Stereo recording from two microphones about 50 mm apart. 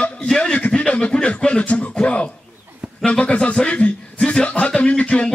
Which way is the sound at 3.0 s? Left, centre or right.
Left.